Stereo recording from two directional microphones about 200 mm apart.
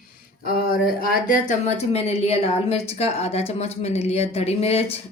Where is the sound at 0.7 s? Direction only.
50° left (ahead or behind).